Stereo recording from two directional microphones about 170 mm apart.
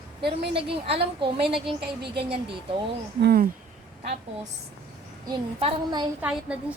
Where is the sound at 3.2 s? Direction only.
70° right (ahead or behind).